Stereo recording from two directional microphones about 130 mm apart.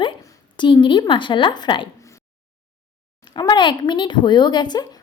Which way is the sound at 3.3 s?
35° left (ahead or behind).